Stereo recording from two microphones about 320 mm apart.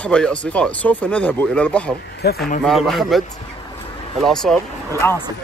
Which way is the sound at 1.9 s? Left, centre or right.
Left.